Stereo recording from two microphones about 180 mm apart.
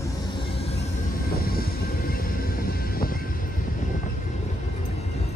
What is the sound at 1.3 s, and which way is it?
Vehicle, 55° left (ahead or behind).